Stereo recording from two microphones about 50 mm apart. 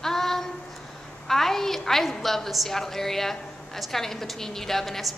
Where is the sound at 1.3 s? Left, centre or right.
Centre.